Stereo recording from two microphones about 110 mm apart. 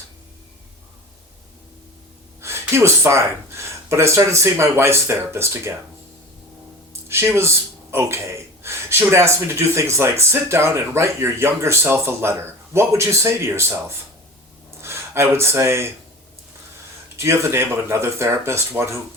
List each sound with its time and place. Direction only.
2.4 s speech: 25° right (ahead or behind)
7.1 s speech: 25° right (ahead or behind)
17.2 s speech: 25° right (ahead or behind)